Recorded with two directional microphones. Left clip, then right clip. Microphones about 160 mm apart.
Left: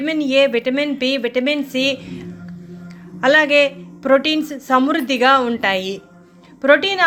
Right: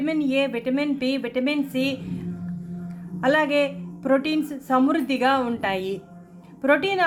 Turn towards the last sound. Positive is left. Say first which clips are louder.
# left 7 dB
turn(degrees=5)  # may be behind; listen again after turning